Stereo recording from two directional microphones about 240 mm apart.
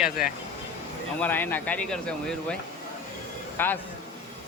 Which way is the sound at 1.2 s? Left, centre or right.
Centre.